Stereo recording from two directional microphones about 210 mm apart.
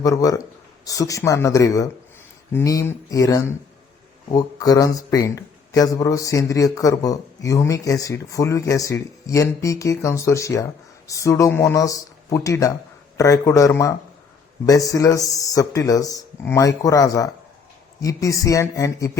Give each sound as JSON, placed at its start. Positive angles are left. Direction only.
{"t": 0.0, "sound": "speech", "side_deg": 15}